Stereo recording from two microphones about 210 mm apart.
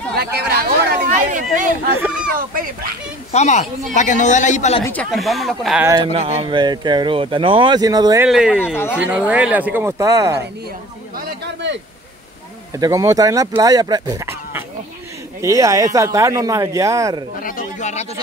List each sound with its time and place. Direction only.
0.1 s speech: 50° right (ahead or behind)
2.0 s speech: 5° right (ahead or behind)
2.3 s speech: 45° right (ahead or behind)
3.3 s a man's voice: 35° left (ahead or behind)
4.8 s speech: 5° left (ahead or behind)
6.1 s speech: 25° right (ahead or behind)
8.3 s speech: 5° right (ahead or behind)
11.1 s a sound: 50° right (ahead or behind)
12.7 s speech: 15° right (ahead or behind)
17.4 s a sound: 40° left (ahead or behind)